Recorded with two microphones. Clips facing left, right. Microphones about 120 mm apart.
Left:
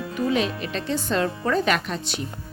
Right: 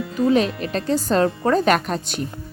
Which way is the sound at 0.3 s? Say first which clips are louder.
Right 6 dB; 40° right (ahead or behind).